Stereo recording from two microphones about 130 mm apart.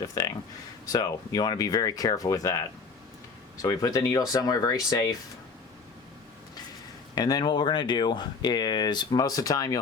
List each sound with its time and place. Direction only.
0.9 s speech: 30° left (ahead or behind)
3.6 s speech: 30° left (ahead or behind)
7.2 s speech: 30° left (ahead or behind)